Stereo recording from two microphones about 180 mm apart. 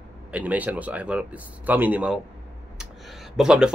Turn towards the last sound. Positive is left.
turn(degrees=-5)  # may be behind; listen again after turning